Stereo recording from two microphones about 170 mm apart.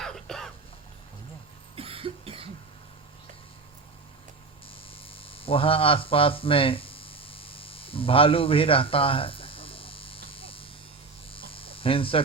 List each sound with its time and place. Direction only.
0.0 s throat clearing: 5° left (ahead or behind)
1.7 s cough: 35° right (ahead or behind)
4.9 s hum: 35° left (ahead or behind)
11.3 s a sound: 30° left (ahead or behind)